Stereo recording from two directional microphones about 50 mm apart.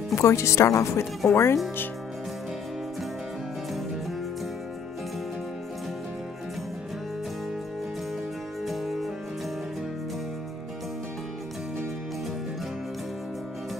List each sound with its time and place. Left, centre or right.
0.1 s speech: left
1.3 s speech: left
8.6 s music: centre